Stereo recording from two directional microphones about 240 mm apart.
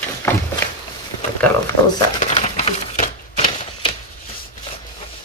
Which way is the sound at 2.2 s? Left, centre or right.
Left.